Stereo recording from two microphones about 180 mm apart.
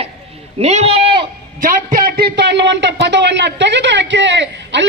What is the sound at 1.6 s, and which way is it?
A woman's voice, 50° right (ahead or behind).